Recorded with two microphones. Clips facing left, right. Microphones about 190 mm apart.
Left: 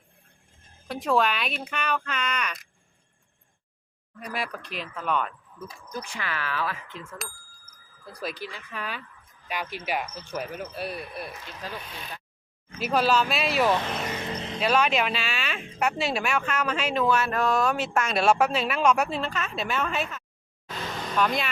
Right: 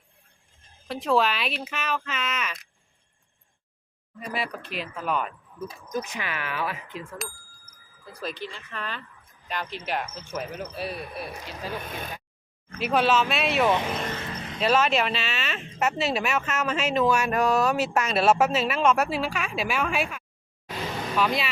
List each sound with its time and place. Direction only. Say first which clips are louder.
0.9 s speech: right 1 dB; centre (ahead or behind)
4.2 s speech: right 1 dB; centre (ahead or behind); by 7.0 s 15° right (ahead or behind)
7.2 s speech: right 3 dB; centre (ahead or behind)
11.8 s speech: right 6 dB; 50° right (ahead or behind)
12.9 s speech: right 1 dB; centre (ahead or behind)
14.1 s music: left 2 dB; 15° left (ahead or behind)
14.6 s speech: right 1 dB; centre (ahead or behind)
20.7 s a sound: right 2 dB; 5° right (ahead or behind)